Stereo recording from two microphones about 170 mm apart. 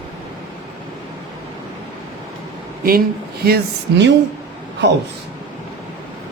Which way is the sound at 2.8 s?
60° right (ahead or behind).